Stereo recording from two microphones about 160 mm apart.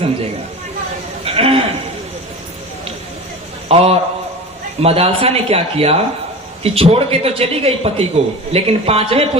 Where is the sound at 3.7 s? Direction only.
40° right (ahead or behind).